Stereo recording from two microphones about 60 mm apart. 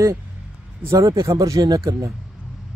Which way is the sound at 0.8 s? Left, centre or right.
Right.